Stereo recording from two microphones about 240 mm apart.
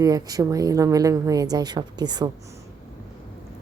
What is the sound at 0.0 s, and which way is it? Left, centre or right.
Speech, centre.